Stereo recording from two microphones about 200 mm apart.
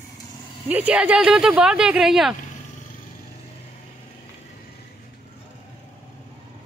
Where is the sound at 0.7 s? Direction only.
5° right (ahead or behind).